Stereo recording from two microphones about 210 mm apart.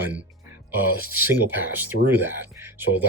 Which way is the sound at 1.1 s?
10° right (ahead or behind).